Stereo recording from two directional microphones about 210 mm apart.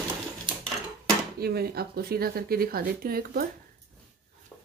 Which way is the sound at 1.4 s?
50° right (ahead or behind).